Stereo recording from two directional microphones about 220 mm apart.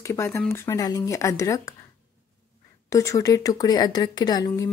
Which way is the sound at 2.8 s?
15° left (ahead or behind).